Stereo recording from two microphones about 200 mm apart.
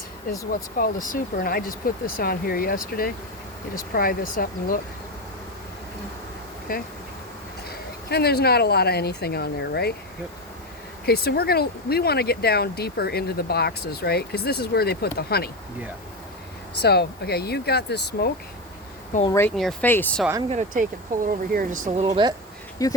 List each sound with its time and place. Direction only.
0.5 s speech: 45° left (ahead or behind)
6.7 s speech: 45° left (ahead or behind)
8.1 s speech: 55° left (ahead or behind)
11.0 s speech: 50° left (ahead or behind)
16.8 s speech: 55° left (ahead or behind)
19.3 s speech: 10° left (ahead or behind)
20.5 s speech: 35° right (ahead or behind)
22.0 s speech: 25° right (ahead or behind)
22.8 s speech: 15° left (ahead or behind)